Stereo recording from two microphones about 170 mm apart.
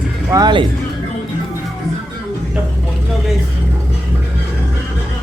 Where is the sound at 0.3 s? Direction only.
25° right (ahead or behind).